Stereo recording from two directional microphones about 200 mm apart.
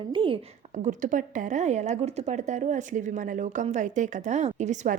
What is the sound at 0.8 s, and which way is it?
A woman's voice, 40° right (ahead or behind).